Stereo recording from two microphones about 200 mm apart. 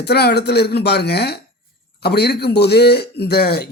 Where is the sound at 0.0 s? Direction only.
55° left (ahead or behind).